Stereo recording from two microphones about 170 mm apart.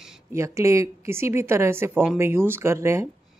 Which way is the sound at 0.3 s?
15° right (ahead or behind).